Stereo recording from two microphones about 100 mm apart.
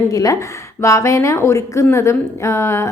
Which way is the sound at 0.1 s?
35° left (ahead or behind).